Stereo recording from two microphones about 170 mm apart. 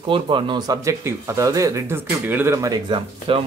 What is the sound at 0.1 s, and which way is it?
Speech, 30° right (ahead or behind).